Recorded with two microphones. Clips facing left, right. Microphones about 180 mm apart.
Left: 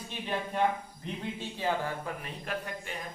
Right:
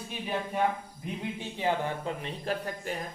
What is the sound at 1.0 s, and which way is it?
Speech, 15° right (ahead or behind).